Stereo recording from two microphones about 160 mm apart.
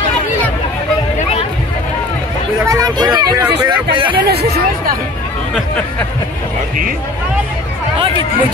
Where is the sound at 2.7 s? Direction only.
25° right (ahead or behind).